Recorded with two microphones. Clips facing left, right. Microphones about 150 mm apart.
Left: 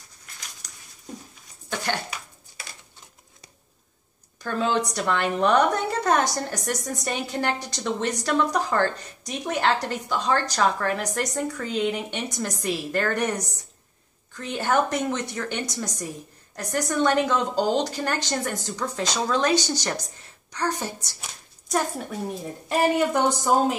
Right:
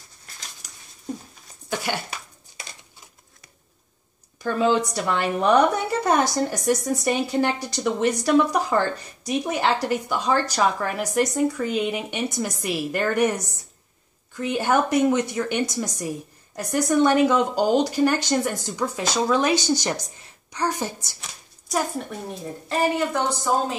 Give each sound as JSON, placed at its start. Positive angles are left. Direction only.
{"t": 1.7, "sound": "speech", "side_deg": -10}
{"t": 4.4, "sound": "a woman's voice", "side_deg": -10}
{"t": 21.2, "sound": "a sound", "side_deg": 0}
{"t": 22.7, "sound": "speech", "side_deg": 15}